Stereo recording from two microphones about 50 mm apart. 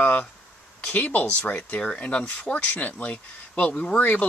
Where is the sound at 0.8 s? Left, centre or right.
Left.